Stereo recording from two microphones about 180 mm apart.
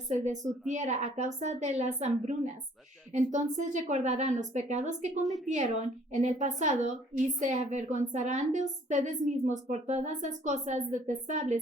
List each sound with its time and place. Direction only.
0.7 s a woman's voice: 40° right (ahead or behind)